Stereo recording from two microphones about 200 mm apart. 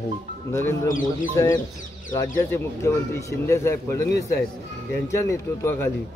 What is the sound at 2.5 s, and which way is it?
Speech, 15° left (ahead or behind).